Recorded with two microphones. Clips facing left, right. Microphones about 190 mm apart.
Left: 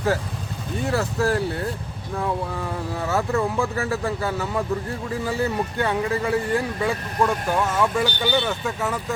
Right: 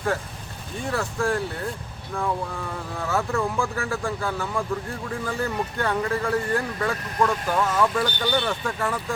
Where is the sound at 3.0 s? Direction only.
Centre (ahead or behind).